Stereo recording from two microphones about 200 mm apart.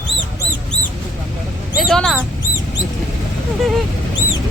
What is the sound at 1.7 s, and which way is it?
Speech, centre (ahead or behind).